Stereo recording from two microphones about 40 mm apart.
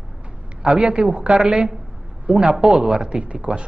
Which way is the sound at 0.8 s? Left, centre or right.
Centre.